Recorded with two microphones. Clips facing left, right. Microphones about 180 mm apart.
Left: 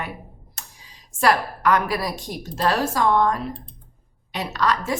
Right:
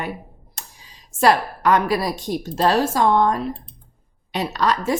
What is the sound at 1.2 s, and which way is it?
A woman's voice, 25° right (ahead or behind).